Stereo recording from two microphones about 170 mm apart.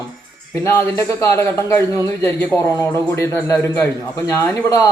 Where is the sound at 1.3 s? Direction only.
15° left (ahead or behind).